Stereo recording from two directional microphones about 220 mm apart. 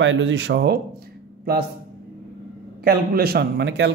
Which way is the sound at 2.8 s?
45° right (ahead or behind).